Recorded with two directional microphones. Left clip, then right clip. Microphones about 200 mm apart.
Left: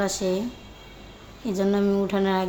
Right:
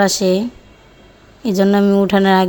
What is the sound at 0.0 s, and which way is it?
Speech, 45° right (ahead or behind).